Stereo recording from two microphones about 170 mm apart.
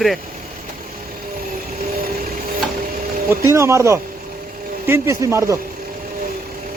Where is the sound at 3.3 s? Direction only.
15° right (ahead or behind).